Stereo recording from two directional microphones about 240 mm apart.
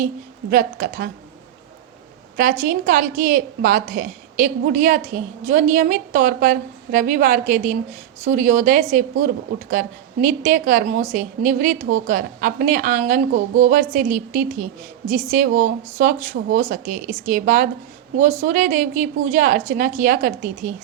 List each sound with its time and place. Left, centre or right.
0.5 s a woman's voice: right
2.3 s a woman's voice: right